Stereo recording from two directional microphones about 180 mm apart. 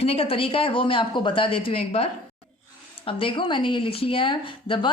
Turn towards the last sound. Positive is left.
turn(degrees=25)  # may be behind; listen again after turning